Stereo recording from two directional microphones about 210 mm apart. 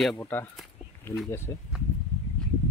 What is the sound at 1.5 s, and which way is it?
Speech, 15° left (ahead or behind).